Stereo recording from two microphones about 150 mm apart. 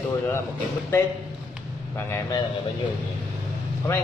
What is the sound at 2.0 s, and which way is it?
Speech, 15° left (ahead or behind).